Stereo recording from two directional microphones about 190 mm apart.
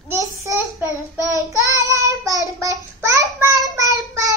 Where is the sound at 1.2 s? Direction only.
20° left (ahead or behind).